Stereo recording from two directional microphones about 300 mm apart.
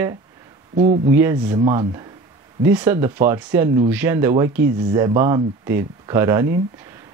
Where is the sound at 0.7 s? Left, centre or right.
Centre.